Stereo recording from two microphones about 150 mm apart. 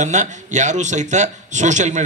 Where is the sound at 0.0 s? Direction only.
55° right (ahead or behind).